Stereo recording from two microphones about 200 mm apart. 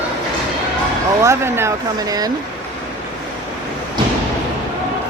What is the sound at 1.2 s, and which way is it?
Speech, 15° right (ahead or behind).